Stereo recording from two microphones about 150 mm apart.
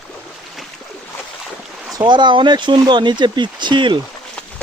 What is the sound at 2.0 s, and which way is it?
Speech, 30° right (ahead or behind).